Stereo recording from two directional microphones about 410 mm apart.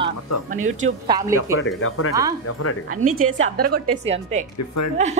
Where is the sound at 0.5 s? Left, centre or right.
Centre.